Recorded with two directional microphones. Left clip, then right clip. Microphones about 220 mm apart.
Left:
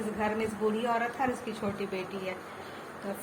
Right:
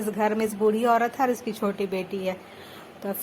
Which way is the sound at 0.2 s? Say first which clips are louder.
Right 7 dB; 50° right (ahead or behind).